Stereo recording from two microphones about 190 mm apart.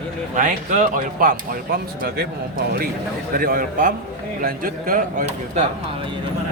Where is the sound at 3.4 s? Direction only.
50° right (ahead or behind).